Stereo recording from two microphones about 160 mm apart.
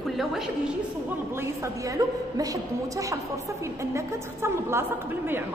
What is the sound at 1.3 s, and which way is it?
A woman's voice, 15° right (ahead or behind).